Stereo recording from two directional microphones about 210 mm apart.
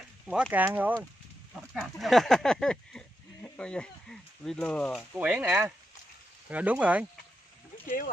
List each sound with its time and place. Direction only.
0.3 s speech: 5° right (ahead or behind)
5.1 s speech: 5° right (ahead or behind)
7.8 s speech: 40° left (ahead or behind)